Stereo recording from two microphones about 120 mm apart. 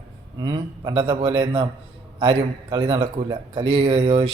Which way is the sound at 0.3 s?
35° right (ahead or behind).